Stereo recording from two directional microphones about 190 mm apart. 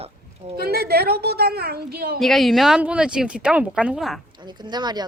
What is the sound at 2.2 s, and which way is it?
Speech, centre (ahead or behind).